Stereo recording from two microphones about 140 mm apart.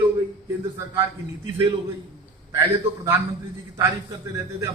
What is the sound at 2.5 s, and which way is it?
Speech, 20° right (ahead or behind).